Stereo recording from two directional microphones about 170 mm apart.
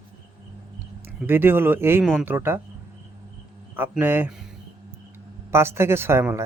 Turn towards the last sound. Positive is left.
turn(degrees=-15)  # may be behind; listen again after turning